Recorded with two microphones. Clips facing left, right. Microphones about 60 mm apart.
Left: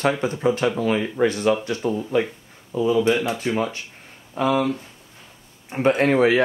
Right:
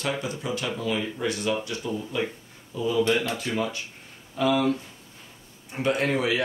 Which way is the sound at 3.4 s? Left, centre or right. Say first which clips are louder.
Left 4 dB; left.